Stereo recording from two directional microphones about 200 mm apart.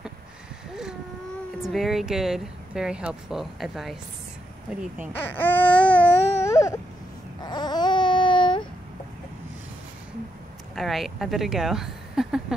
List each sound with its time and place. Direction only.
1.6 s speech: centre (ahead or behind)
5.1 s speech: 10° left (ahead or behind)
5.9 s baby cry: 10° left (ahead or behind); by 8.6 s 25° left (ahead or behind)
10.7 s speech: centre (ahead or behind)